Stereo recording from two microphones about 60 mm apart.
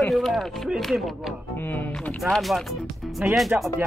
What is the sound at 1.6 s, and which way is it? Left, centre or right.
Speech, left.